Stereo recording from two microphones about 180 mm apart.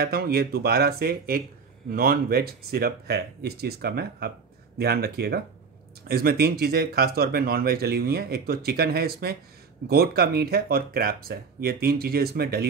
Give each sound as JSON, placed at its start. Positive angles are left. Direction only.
{"t": 0.0, "sound": "speech", "side_deg": -60}